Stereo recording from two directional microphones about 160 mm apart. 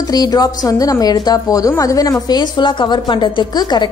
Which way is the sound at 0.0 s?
25° left (ahead or behind).